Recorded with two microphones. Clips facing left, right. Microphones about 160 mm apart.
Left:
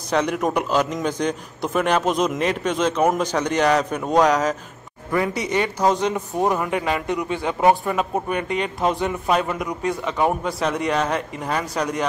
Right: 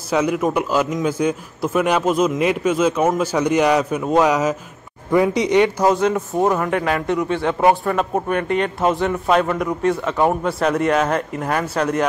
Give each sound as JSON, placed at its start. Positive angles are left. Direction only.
{"t": 0.1, "sound": "a man's voice", "side_deg": -5}